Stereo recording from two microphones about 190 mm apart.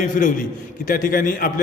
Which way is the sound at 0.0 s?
45° left (ahead or behind).